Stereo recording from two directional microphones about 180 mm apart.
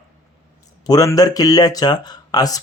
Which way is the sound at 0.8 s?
20° left (ahead or behind).